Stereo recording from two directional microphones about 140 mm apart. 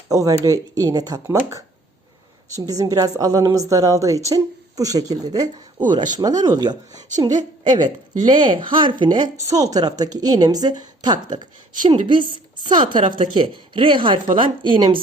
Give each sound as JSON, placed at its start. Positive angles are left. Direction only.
{"t": 0.1, "sound": "a woman's voice", "side_deg": -25}